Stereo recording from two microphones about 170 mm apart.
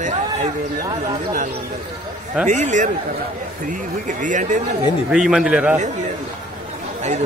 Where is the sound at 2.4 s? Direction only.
45° right (ahead or behind).